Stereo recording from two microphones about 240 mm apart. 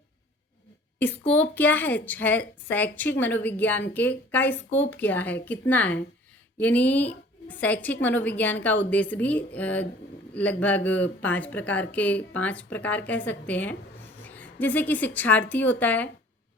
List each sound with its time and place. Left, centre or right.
0.9 s a woman's voice: centre